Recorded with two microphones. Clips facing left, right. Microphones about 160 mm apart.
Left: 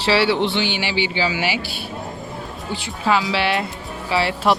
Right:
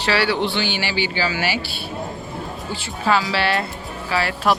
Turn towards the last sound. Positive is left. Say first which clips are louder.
# left 1 dB
turn(degrees=20)  # may be behind; listen again after turning